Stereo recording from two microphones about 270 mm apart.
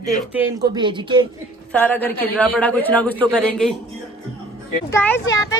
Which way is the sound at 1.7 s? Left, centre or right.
Centre.